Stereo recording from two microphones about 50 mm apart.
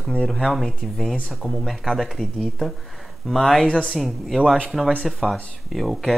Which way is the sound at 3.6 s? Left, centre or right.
Centre.